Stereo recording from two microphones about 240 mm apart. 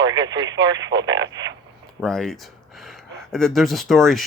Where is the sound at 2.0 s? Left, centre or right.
Centre.